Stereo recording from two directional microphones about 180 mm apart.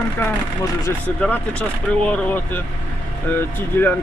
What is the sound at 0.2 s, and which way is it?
Speech, 10° left (ahead or behind).